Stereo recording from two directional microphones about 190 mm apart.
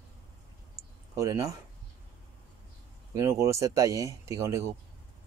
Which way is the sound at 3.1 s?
15° right (ahead or behind).